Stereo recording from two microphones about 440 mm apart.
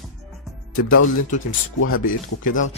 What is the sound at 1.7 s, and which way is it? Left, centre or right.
Speech, left.